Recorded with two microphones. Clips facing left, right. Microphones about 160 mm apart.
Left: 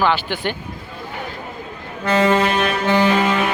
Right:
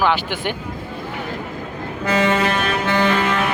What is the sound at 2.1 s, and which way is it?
Music, 35° left (ahead or behind).